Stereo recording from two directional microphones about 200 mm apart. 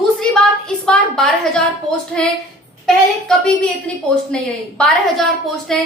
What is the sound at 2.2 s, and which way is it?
A woman's voice, 5° left (ahead or behind).